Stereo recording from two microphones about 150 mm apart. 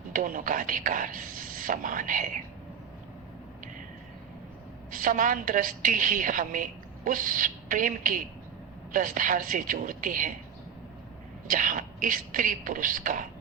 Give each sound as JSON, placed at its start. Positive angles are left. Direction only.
{"t": 0.1, "sound": "a woman's voice", "side_deg": -65}
{"t": 4.9, "sound": "a woman's voice", "side_deg": -65}
{"t": 11.4, "sound": "a woman's voice", "side_deg": -60}